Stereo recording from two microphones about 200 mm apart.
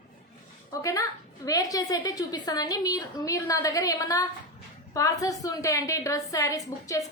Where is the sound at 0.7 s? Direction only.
15° left (ahead or behind).